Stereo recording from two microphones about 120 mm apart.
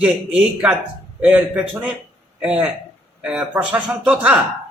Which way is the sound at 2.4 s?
5° right (ahead or behind).